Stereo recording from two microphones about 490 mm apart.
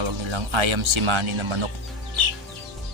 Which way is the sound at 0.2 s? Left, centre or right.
Right.